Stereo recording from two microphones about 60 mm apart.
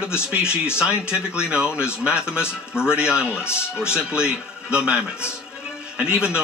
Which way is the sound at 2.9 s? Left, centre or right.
Centre.